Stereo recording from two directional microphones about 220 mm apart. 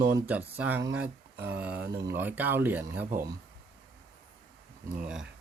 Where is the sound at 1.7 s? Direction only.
45° right (ahead or behind).